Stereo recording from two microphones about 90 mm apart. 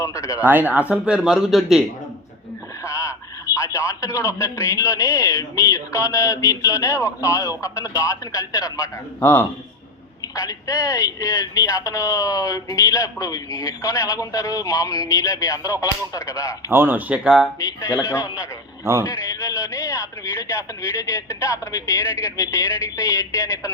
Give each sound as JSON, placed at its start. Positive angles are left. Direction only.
{"t": 0.0, "sound": "a man's voice", "side_deg": 35}
{"t": 0.3, "sound": "speech", "side_deg": -20}
{"t": 2.8, "sound": "a sound", "side_deg": 35}
{"t": 3.8, "sound": "a man's voice", "side_deg": 30}
{"t": 9.2, "sound": "a man's voice", "side_deg": 20}
{"t": 10.3, "sound": "a man's voice", "side_deg": 35}
{"t": 16.7, "sound": "speech", "side_deg": -20}
{"t": 17.2, "sound": "speech", "side_deg": -5}
{"t": 17.7, "sound": "a man's voice", "side_deg": 40}
{"t": 23.0, "sound": "a man's voice", "side_deg": 30}